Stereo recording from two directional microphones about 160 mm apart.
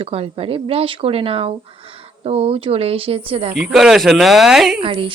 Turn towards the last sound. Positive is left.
turn(degrees=-35)  # may be behind; listen again after turning